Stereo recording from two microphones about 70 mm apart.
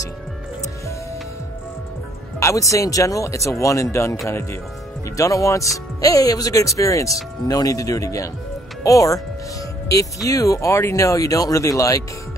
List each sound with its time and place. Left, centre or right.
2.4 s speech: left
5.1 s speech: left
7.4 s speech: left
10.2 s speech: left